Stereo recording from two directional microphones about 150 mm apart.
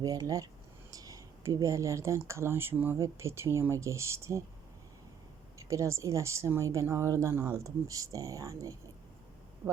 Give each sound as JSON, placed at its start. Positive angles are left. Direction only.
{"t": 0.0, "sound": "speech", "side_deg": -25}
{"t": 5.5, "sound": "speech", "side_deg": -20}